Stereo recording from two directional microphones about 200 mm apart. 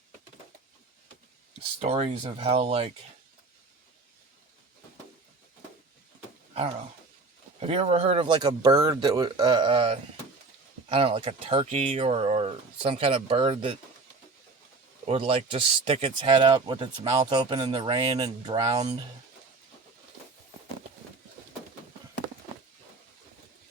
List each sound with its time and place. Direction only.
1.8 s speech: 30° right (ahead or behind)
6.5 s speech: 30° right (ahead or behind)
15.0 s speech: 30° right (ahead or behind)